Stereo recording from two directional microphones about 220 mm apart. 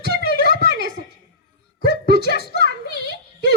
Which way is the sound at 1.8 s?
50° right (ahead or behind).